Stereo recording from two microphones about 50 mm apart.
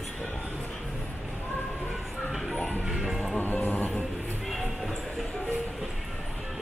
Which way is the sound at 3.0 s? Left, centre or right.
Centre.